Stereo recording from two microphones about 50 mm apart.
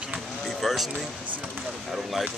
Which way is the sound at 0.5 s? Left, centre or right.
Centre.